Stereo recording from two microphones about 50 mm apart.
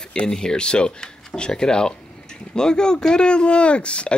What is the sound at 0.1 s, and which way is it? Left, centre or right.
Speech, centre.